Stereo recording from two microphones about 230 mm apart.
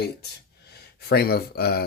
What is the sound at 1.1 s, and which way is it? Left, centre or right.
Speech, left.